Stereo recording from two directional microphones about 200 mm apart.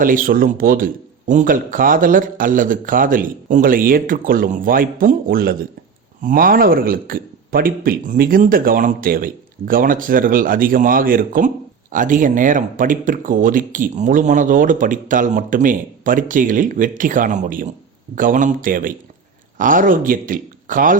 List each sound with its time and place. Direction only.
0.0 s speech: 45° right (ahead or behind)